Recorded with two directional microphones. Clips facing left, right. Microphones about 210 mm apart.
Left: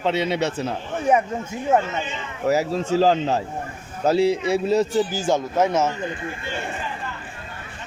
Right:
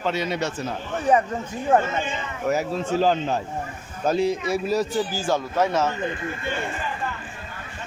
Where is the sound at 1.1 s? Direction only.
10° left (ahead or behind).